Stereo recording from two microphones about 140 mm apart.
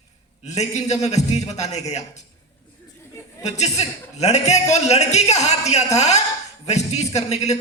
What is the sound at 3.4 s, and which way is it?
A man's voice, 55° left (ahead or behind).